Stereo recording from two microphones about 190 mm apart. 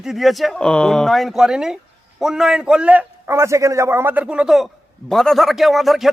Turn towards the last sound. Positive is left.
turn(degrees=0)  # may be behind; listen again after turning